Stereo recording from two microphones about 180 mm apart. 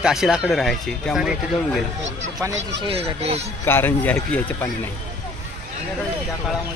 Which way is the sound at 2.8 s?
35° right (ahead or behind).